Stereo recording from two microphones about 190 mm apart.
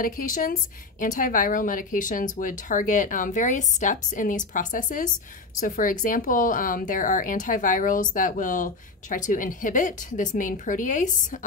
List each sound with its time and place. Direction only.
0.0 s a woman's voice: 45° left (ahead or behind)